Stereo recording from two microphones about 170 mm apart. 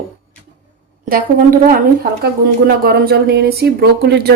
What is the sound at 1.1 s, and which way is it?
A woman's voice, 55° right (ahead or behind).